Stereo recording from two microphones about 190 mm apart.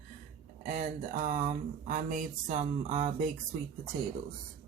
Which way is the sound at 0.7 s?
50° right (ahead or behind).